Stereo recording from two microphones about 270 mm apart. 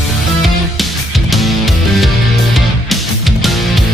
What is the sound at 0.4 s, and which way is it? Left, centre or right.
Music, centre.